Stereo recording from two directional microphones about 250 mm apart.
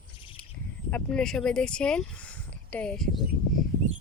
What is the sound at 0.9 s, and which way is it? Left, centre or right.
Speech, centre.